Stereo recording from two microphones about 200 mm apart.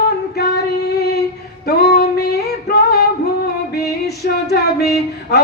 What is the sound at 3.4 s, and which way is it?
Music, 55° left (ahead or behind).